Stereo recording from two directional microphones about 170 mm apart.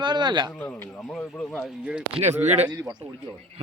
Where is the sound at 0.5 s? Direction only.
10° left (ahead or behind); by 2.0 s 5° right (ahead or behind).